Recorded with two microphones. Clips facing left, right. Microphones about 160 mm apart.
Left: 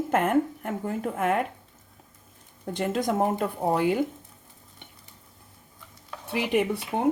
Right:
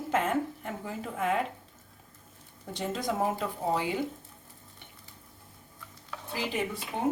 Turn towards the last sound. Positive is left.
turn(degrees=65)  # may be behind; listen again after turning